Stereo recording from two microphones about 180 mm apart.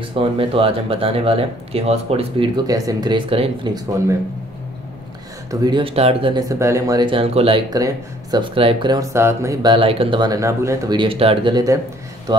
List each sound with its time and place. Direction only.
0.0 s speech: 30° right (ahead or behind)
5.5 s speech: 20° right (ahead or behind)
6.5 s speech: 15° right (ahead or behind)
12.3 s a sound: 25° right (ahead or behind)